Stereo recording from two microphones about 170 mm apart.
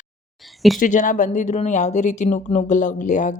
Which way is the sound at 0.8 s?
50° left (ahead or behind).